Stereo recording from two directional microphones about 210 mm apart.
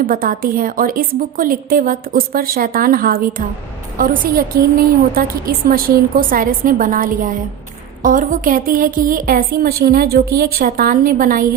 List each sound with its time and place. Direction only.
0.0 s a woman's voice: 45° right (ahead or behind)